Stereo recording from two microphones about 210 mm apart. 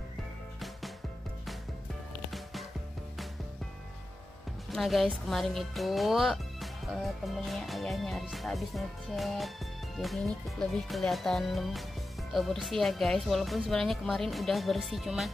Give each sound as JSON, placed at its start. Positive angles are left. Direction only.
{"t": 4.6, "sound": "a woman's voice", "side_deg": 0}